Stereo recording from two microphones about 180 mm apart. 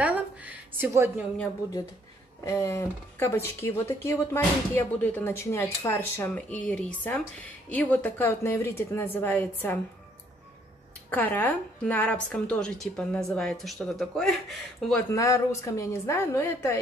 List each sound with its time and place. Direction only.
0.0 s a sound: 10° right (ahead or behind)
2.4 s speech: 15° left (ahead or behind)
11.1 s a woman's voice: 10° left (ahead or behind)
15.1 s speech: 15° left (ahead or behind)